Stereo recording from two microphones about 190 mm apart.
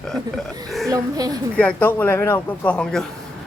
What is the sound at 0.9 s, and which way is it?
Speech, 20° right (ahead or behind).